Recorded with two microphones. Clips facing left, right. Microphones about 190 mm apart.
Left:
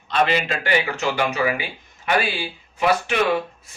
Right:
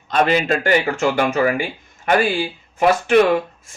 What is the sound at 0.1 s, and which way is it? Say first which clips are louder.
Speech: right 4 dB; 45° right (ahead or behind).